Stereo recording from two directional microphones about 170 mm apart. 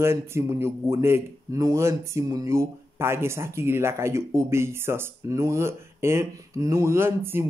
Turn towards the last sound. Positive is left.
turn(degrees=-15)  # may be behind; listen again after turning